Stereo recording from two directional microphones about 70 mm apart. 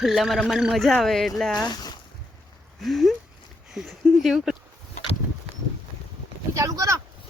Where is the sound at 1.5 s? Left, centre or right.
Left.